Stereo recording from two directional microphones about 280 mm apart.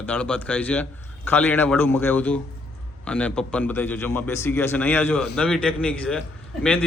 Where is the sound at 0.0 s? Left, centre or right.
Centre.